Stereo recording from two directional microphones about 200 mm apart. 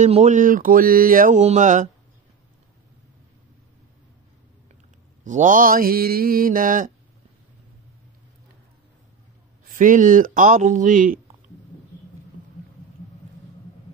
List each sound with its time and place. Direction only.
0.0 s mantra: 35° right (ahead or behind)
5.2 s mantra: 40° right (ahead or behind)
9.7 s mantra: 40° right (ahead or behind)